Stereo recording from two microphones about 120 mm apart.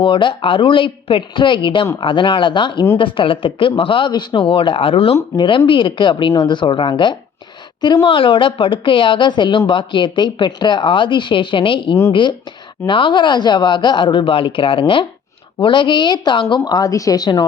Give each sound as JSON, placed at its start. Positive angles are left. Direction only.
{"t": 0.0, "sound": "speech", "side_deg": 45}
{"t": 16.6, "sound": "speech", "side_deg": 30}